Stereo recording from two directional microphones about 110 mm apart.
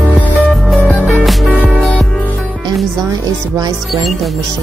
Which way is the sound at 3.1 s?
35° right (ahead or behind).